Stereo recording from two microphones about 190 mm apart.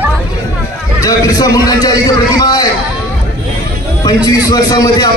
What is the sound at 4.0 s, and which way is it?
A man's voice, 20° left (ahead or behind).